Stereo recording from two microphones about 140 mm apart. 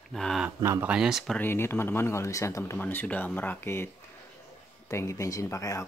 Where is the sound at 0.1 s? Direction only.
Centre (ahead or behind).